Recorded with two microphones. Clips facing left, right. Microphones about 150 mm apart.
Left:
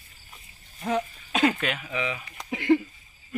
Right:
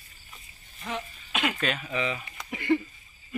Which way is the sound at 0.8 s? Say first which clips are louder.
Left 8 dB; 40° left (ahead or behind).